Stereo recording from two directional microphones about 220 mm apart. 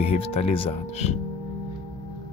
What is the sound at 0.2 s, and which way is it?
Speech, 25° left (ahead or behind).